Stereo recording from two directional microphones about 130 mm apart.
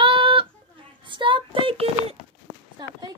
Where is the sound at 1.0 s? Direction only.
40° right (ahead or behind).